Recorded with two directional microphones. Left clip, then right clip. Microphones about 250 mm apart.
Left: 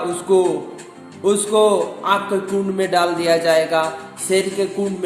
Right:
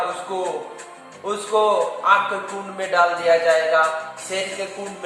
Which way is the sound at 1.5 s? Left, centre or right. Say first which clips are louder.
Left 3 dB; left.